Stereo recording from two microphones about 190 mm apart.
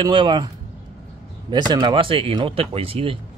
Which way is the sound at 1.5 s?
20° right (ahead or behind).